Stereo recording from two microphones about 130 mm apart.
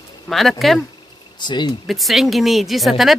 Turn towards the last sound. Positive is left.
turn(degrees=0)  # may be behind; listen again after turning